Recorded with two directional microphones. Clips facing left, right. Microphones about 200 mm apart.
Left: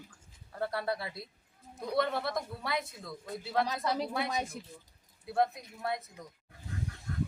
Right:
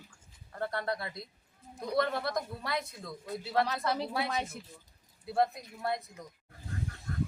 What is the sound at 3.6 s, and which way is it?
Speech, 15° left (ahead or behind).